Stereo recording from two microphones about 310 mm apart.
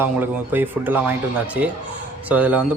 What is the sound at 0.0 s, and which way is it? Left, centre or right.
A man's voice, centre.